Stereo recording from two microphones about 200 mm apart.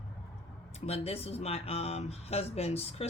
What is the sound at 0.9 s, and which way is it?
Speech, 30° left (ahead or behind).